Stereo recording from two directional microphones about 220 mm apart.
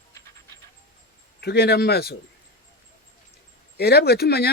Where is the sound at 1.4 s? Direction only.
45° left (ahead or behind).